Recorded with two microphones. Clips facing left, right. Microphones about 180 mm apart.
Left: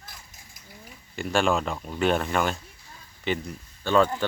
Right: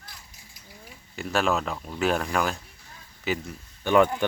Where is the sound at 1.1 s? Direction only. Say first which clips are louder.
Left 1 dB; centre (ahead or behind).